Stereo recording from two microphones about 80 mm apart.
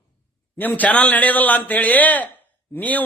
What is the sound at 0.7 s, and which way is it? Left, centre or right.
Speech, centre.